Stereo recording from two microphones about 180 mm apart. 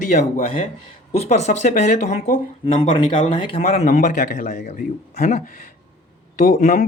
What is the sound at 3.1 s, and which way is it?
A man's voice, 30° left (ahead or behind).